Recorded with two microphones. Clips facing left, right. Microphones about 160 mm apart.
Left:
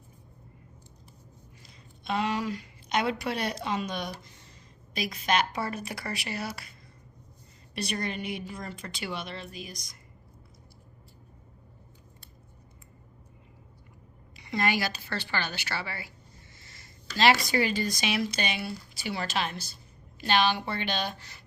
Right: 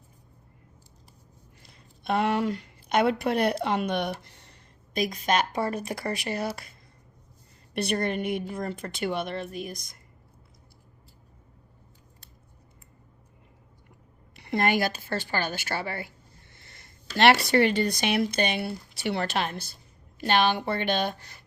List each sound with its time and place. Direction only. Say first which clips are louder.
1.6 s a woman's voice: right 4 dB; 55° right (ahead or behind)
4.2 s a sound: left 1 dB; 65° right (ahead or behind)
4.9 s a woman's voice: right 3 dB; 45° right (ahead or behind)
7.7 s a woman's voice: right 6 dB; 55° right (ahead or behind)
14.3 s a woman's voice: right 4 dB; 55° right (ahead or behind)
16.6 s a sound: even; 55° right (ahead or behind)
17.2 s a woman's voice: right 4 dB; 65° right (ahead or behind)